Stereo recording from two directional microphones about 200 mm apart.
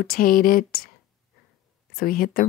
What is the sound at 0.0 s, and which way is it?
Speech, 45° left (ahead or behind).